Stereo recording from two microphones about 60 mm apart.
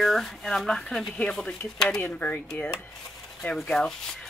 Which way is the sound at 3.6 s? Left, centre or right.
Centre.